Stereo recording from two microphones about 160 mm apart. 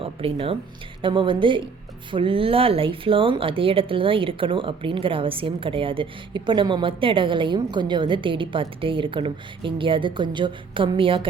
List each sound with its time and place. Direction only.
0.0 s speech: 35° right (ahead or behind)